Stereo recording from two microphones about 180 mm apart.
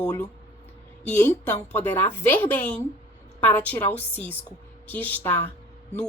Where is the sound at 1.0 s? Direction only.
10° left (ahead or behind).